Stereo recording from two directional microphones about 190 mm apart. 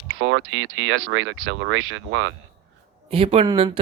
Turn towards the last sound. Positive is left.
turn(degrees=-25)  # may be behind; listen again after turning